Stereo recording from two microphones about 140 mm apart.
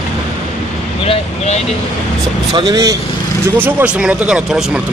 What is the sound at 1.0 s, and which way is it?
Vehicle, 50° left (ahead or behind).